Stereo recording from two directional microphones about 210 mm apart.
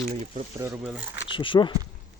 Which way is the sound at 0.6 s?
5° right (ahead or behind).